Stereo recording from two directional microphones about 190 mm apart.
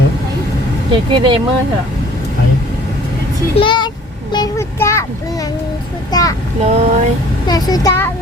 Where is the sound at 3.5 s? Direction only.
25° left (ahead or behind).